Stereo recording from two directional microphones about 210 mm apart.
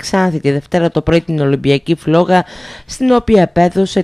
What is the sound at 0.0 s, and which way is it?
Speech, centre (ahead or behind).